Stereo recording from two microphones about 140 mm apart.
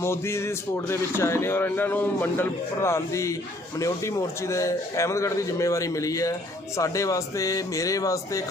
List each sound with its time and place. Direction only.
0.0 s a man's voice: 20° left (ahead or behind)